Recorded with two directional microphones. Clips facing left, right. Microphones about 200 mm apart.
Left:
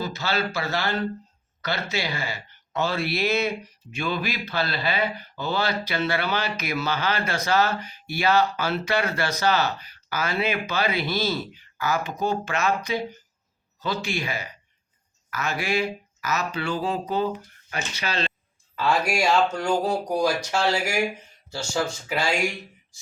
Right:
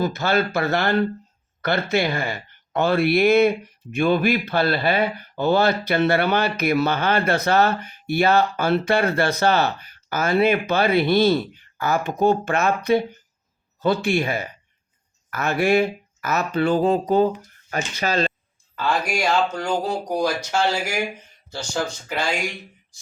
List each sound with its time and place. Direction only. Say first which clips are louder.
0.0 s speech: right 6 dB; 55° right (ahead or behind)
18.8 s speech: even; centre (ahead or behind)
22.1 s speech: left 1 dB; centre (ahead or behind)